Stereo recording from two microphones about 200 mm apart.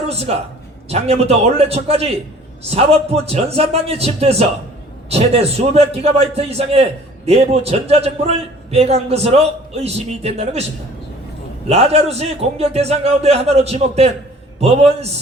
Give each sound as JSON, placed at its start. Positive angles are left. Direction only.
{"t": 0.1, "sound": "a man's voice", "side_deg": -30}
{"t": 11.7, "sound": "a man's voice", "side_deg": -30}